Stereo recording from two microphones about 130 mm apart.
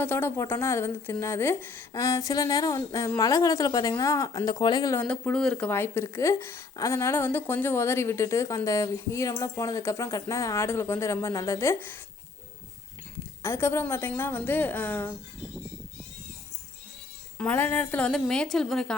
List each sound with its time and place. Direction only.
0.0 s a woman's voice: 15° left (ahead or behind)
4.9 s speech: 10° left (ahead or behind)
13.4 s a woman's voice: 20° left (ahead or behind)
17.3 s a woman's voice: 10° left (ahead or behind)